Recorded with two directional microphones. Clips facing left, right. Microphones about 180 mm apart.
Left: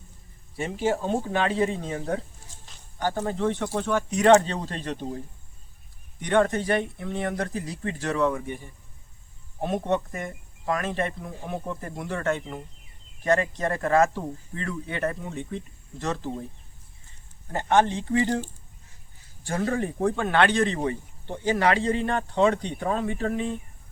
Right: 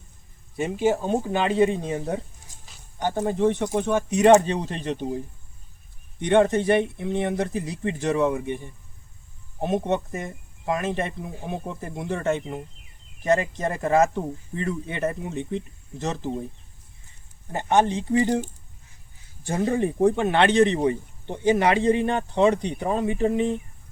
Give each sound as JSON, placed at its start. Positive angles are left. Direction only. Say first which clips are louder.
{"t": 0.5, "sound": "speech", "louder": "right 3 dB", "side_deg": -15}
{"t": 6.2, "sound": "speech", "louder": "right 4 dB", "side_deg": -20}
{"t": 17.5, "sound": "speech", "louder": "right 1 dB", "side_deg": -15}